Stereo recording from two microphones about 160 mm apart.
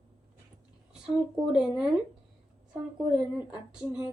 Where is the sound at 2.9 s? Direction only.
10° right (ahead or behind).